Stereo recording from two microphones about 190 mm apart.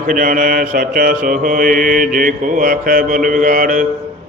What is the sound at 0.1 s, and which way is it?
Mantra, 45° right (ahead or behind).